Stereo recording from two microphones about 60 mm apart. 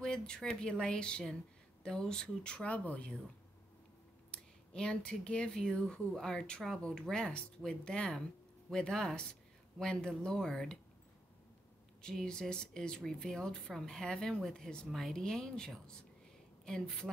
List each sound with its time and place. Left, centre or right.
0.0 s speech: centre
4.3 s speech: centre
12.0 s speech: centre